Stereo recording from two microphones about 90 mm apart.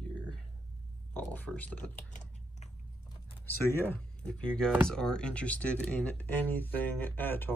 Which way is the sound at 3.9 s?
10° left (ahead or behind).